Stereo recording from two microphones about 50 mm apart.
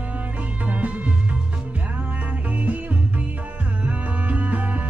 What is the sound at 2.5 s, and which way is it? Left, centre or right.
Music, right.